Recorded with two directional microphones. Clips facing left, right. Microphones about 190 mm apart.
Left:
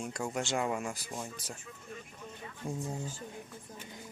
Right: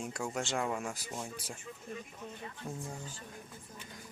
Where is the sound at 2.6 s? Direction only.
20° left (ahead or behind).